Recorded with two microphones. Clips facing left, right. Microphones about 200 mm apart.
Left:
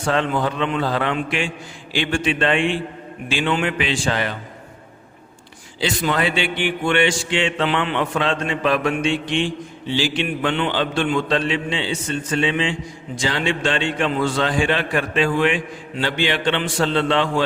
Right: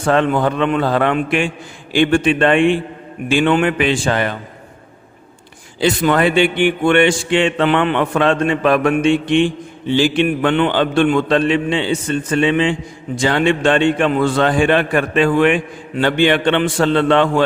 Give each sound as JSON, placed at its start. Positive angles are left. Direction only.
{"t": 0.0, "sound": "a man's voice", "side_deg": -55}
{"t": 5.8, "sound": "a man's voice", "side_deg": -55}